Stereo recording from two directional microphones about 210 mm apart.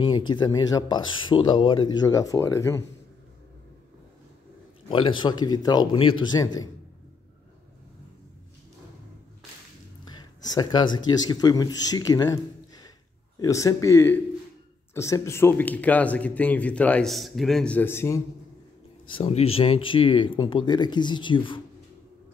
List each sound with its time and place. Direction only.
0.3 s speech: 20° left (ahead or behind)
4.8 s speech: 25° left (ahead or behind)
10.0 s a sound: 20° left (ahead or behind)
11.1 s speech: 20° left (ahead or behind)
19.1 s speech: 25° left (ahead or behind)